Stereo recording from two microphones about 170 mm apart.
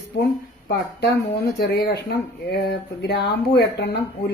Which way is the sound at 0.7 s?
80° left.